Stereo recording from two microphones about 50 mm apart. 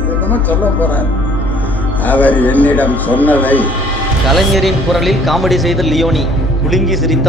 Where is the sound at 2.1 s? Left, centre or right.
Left.